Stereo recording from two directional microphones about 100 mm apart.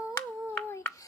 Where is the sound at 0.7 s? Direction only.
25° left (ahead or behind).